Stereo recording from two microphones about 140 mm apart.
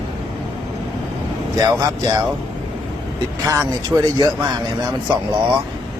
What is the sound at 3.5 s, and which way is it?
Speech, 25° right (ahead or behind).